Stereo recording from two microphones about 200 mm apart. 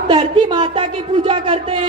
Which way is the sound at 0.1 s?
25° right (ahead or behind).